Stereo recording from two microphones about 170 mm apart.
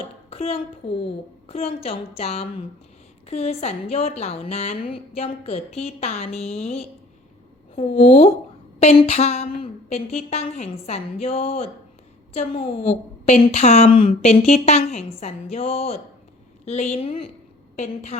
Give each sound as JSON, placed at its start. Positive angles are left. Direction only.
{"t": 0.3, "sound": "a woman's voice", "side_deg": 35}